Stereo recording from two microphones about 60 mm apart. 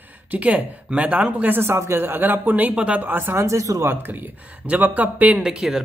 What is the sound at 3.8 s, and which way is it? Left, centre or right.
A man's voice, right.